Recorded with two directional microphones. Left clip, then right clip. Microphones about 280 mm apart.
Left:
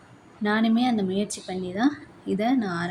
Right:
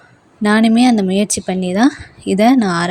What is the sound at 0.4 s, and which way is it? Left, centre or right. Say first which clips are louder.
A woman's voice: right 11 dB; right.